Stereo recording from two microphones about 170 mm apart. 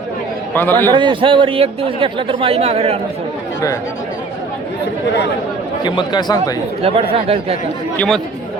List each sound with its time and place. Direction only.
0.5 s a man's voice: 10° left (ahead or behind)
0.9 s speech: 30° right (ahead or behind)
5.8 s speech: 25° left (ahead or behind)
6.8 s speech: 35° right (ahead or behind)
7.9 s speech: centre (ahead or behind)